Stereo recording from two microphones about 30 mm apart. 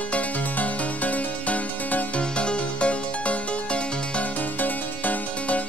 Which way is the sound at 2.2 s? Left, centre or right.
Left.